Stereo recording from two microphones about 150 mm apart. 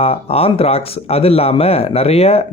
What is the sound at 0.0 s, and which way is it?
Speech, 40° left (ahead or behind).